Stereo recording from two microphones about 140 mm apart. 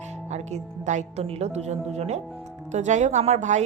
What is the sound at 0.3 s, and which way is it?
A woman's voice, 55° right (ahead or behind).